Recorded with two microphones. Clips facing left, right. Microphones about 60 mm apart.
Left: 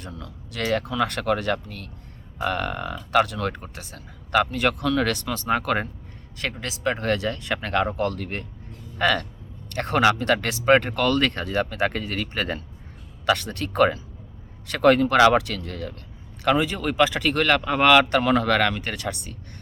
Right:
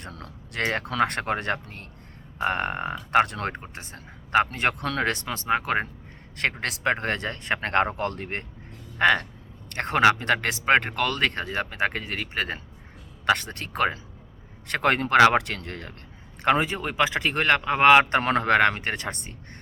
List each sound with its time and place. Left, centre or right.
0.2 s speech: right; by 5.9 s centre
6.6 s speech: right
7.0 s speech: right; by 12.6 s centre
13.2 s speech: right
14.7 s speech: right